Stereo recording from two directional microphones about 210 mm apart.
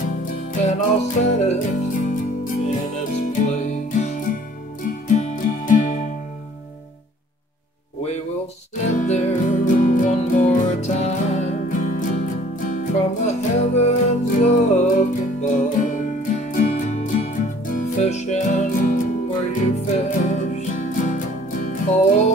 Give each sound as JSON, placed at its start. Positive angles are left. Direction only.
{"t": 0.2, "sound": "music", "side_deg": 40}
{"t": 8.8, "sound": "music", "side_deg": 35}